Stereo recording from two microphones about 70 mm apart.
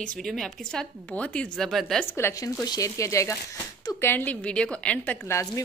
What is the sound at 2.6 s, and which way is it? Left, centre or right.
Speech, left.